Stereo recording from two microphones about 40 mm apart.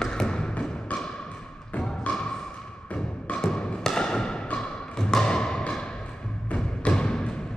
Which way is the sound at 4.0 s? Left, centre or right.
Centre.